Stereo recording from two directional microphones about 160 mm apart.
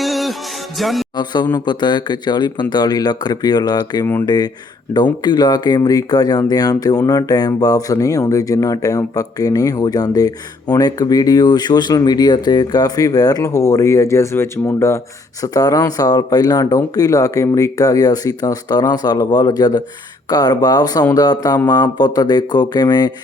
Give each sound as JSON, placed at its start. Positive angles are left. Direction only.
{"t": 0.0, "sound": "music", "side_deg": 0}
{"t": 0.8, "sound": "speech", "side_deg": 0}
{"t": 1.1, "sound": "speech", "side_deg": 25}
{"t": 5.2, "sound": "speech", "side_deg": 25}